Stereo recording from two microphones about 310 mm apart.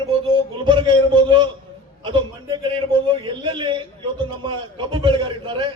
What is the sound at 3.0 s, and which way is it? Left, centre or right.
A man's voice, centre.